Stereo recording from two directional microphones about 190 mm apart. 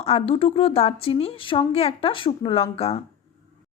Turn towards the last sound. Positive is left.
turn(degrees=30)  # may be behind; listen again after turning